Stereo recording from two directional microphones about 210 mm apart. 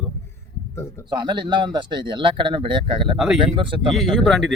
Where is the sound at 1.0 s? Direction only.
20° right (ahead or behind).